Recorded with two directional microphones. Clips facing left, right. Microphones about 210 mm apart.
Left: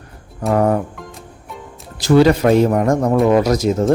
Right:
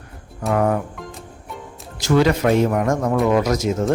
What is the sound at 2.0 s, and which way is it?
Speech, 35° left (ahead or behind).